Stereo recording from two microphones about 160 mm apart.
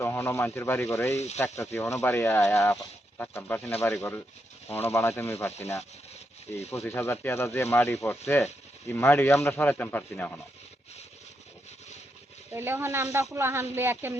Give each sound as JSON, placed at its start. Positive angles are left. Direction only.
{"t": 0.0, "sound": "speech", "side_deg": 15}
{"t": 6.8, "sound": "speech", "side_deg": 15}
{"t": 12.5, "sound": "speech", "side_deg": -15}